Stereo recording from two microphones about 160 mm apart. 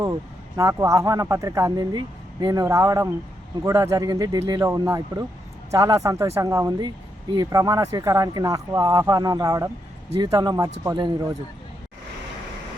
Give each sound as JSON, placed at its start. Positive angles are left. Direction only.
{"t": 0.0, "sound": "speech", "side_deg": -20}